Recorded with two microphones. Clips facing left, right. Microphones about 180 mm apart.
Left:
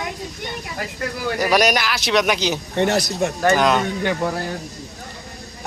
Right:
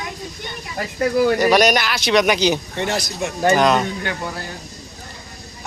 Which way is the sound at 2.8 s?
60° left (ahead or behind).